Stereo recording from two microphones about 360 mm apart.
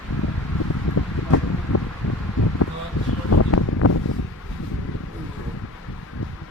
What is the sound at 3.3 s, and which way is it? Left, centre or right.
Wind, left.